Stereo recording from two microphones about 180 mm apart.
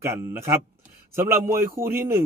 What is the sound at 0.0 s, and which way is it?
A man's voice, 15° right (ahead or behind).